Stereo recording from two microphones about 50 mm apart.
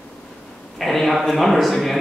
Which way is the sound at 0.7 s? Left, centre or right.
Centre.